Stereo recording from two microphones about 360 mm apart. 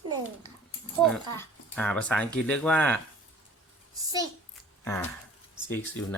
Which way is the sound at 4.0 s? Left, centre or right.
Centre.